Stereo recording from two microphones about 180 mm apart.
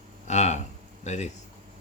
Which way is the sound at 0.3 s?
40° left (ahead or behind).